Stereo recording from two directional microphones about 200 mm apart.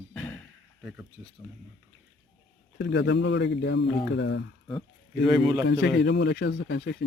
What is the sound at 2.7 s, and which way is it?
Speech, 60° left (ahead or behind).